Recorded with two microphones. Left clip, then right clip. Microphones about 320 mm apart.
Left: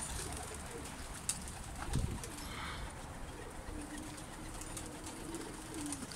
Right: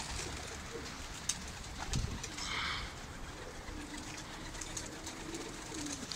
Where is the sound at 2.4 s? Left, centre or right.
Centre.